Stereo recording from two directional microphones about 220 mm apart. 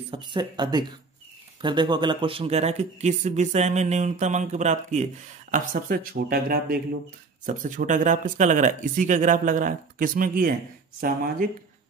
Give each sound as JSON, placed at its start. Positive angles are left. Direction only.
{"t": 0.1, "sound": "speech", "side_deg": -20}